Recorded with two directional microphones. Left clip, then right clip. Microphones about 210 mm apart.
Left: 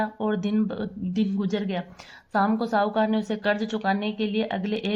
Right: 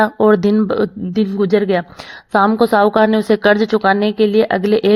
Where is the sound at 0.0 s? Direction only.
50° right (ahead or behind).